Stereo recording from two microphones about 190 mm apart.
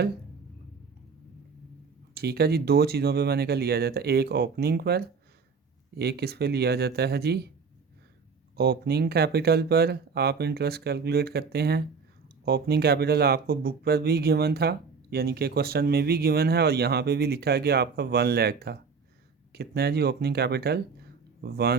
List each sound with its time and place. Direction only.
2.1 s speech: 55° right (ahead or behind)
8.5 s speech: 55° right (ahead or behind)